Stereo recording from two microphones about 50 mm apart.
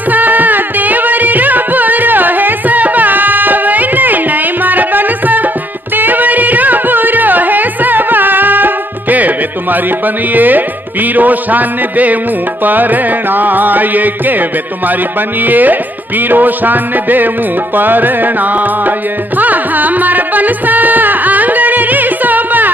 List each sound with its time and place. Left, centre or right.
0.1 s music: right
15.4 s music: right